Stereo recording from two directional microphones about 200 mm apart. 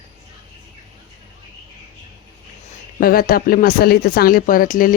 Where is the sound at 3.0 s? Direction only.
45° left (ahead or behind).